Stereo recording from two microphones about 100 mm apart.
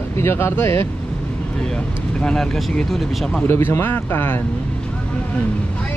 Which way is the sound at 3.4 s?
25° left (ahead or behind).